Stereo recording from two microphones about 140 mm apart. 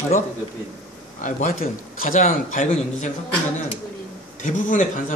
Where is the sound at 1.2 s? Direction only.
75° left (ahead or behind).